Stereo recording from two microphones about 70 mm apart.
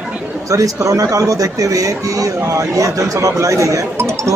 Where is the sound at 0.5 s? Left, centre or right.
Right.